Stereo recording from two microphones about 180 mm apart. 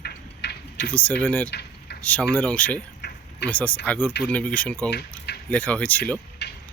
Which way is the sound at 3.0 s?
75° left (ahead or behind).